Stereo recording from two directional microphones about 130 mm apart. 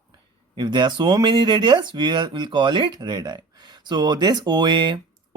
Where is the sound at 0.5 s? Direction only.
35° right (ahead or behind).